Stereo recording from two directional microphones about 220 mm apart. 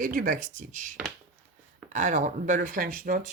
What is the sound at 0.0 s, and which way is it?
Speech, 35° right (ahead or behind).